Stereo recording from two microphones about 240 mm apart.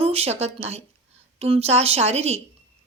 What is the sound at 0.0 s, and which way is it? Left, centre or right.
A woman's voice, right.